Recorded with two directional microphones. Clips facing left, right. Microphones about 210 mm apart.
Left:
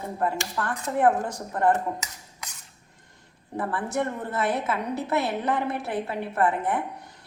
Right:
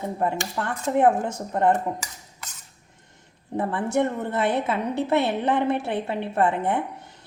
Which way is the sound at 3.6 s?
25° right (ahead or behind).